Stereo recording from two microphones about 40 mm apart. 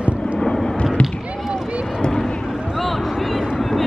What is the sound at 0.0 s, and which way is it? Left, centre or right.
Vehicle, right.